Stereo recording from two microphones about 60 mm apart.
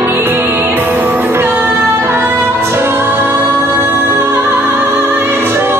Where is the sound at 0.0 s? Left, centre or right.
Right.